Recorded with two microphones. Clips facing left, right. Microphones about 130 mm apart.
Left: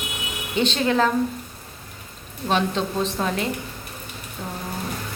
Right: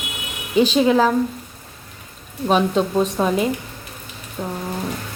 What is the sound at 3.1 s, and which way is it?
A woman's voice, 15° right (ahead or behind).